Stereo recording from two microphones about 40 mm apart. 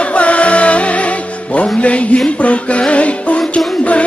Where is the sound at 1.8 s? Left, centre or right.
Left.